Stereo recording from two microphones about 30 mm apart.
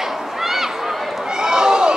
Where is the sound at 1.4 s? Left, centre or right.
Right.